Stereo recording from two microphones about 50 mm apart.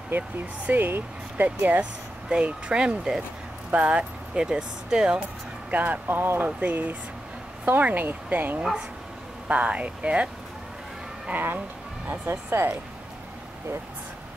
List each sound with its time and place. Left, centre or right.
0.1 s speech: right
2.2 s speech: centre
4.4 s speech: centre
5.7 s speech: right
9.5 s speech: right
11.3 s speech: right
12.3 s speech: right